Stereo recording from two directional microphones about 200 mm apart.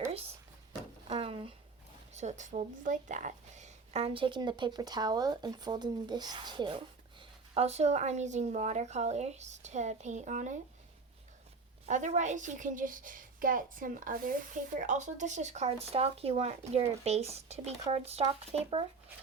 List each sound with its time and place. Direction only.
1.0 s a sound: 30° right (ahead or behind)
2.1 s a woman's voice: 35° right (ahead or behind)
11.9 s a woman's voice: 35° right (ahead or behind)